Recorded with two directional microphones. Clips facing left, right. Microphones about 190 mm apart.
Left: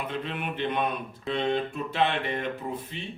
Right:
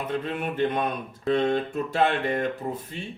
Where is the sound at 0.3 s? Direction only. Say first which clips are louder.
Right 5 dB; 45° right (ahead or behind).